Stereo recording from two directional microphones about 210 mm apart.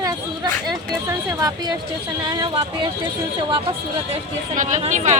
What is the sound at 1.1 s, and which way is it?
Speech, 15° right (ahead or behind).